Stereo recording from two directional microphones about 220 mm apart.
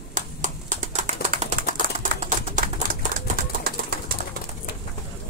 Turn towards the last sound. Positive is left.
turn(degrees=-45)  # may be behind; listen again after turning